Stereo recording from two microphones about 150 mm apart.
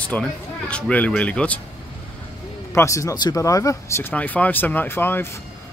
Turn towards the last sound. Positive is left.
turn(degrees=15)  # may be behind; listen again after turning